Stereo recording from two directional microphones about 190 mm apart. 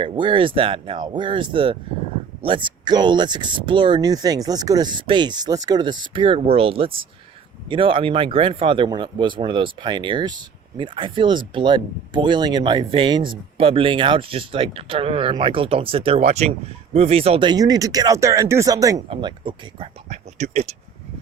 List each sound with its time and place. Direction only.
0.0 s speech: 25° right (ahead or behind)